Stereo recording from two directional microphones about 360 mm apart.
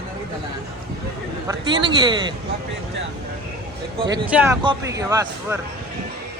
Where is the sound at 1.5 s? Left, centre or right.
Centre.